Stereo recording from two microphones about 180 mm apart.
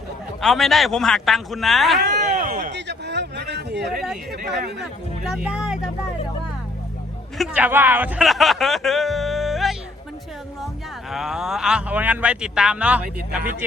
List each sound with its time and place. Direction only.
0.4 s a man's voice: centre (ahead or behind)
2.2 s a sound: 50° right (ahead or behind)
2.7 s a sound: 70° right (ahead or behind)
5.2 s a man's voice: 5° right (ahead or behind)
7.3 s speech: 5° right (ahead or behind)
11.1 s a man's voice: centre (ahead or behind)